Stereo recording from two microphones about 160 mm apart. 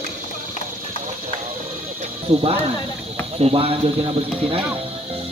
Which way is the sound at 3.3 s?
40° right (ahead or behind).